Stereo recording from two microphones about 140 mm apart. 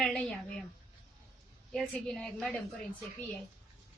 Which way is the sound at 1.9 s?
5° left (ahead or behind).